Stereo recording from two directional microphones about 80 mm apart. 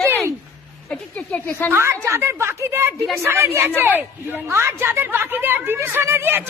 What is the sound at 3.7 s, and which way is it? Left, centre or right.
Speech, right.